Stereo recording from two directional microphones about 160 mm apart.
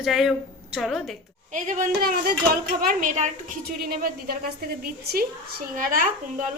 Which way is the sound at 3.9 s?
75° right (ahead or behind).